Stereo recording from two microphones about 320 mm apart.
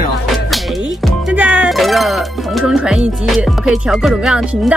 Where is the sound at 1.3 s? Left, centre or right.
Centre.